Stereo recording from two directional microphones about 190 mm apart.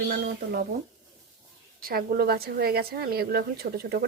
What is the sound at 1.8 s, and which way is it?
A woman's voice, 50° right (ahead or behind).